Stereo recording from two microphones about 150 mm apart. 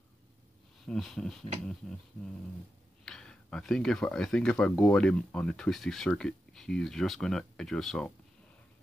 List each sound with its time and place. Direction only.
0.8 s speech: centre (ahead or behind)
3.1 s speech: 5° left (ahead or behind)